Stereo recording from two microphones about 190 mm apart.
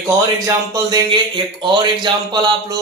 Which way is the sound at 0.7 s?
20° right (ahead or behind).